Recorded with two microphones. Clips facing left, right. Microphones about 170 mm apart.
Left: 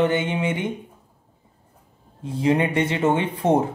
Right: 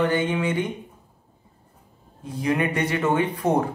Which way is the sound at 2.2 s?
25° left (ahead or behind).